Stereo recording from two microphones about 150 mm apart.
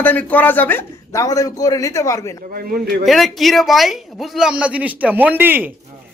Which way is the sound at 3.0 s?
Centre (ahead or behind).